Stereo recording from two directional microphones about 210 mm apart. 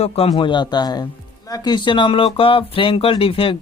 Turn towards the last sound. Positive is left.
turn(degrees=25)  # may be behind; listen again after turning